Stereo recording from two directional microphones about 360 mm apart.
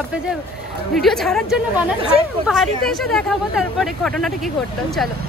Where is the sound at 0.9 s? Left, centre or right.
Centre.